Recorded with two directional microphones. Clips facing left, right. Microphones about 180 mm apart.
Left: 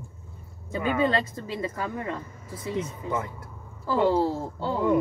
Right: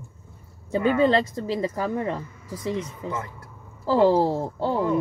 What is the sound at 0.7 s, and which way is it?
A woman's voice, 30° right (ahead or behind).